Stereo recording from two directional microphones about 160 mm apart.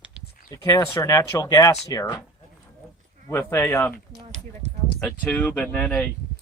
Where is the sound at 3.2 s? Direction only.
15° left (ahead or behind).